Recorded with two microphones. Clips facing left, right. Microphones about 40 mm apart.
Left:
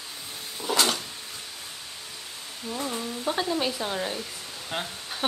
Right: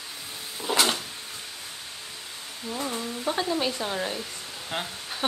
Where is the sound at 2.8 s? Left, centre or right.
Centre.